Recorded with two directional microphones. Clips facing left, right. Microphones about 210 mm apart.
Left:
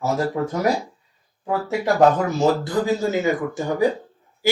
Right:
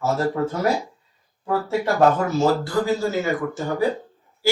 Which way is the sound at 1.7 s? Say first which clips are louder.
Left 2 dB; 15° left (ahead or behind).